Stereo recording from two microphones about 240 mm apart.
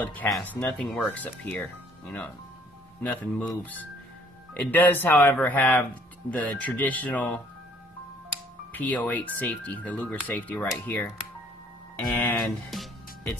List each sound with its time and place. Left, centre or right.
0.0 s speech: centre
4.6 s speech: centre
8.7 s speech: centre
12.2 s speech: centre